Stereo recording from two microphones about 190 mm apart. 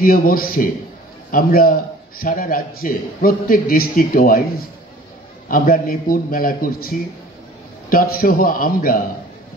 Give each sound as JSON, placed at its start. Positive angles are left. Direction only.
{"t": 0.0, "sound": "a man's voice", "side_deg": 50}